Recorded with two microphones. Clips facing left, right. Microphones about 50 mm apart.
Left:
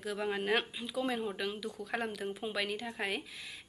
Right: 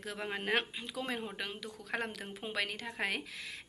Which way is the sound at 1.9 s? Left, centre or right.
Right.